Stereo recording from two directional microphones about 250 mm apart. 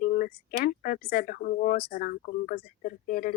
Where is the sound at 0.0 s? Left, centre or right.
Left.